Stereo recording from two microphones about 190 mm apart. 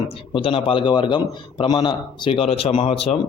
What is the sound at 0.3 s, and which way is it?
A man's voice, 25° left (ahead or behind).